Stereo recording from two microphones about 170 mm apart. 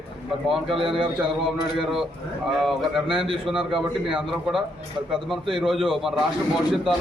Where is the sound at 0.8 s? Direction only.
30° right (ahead or behind).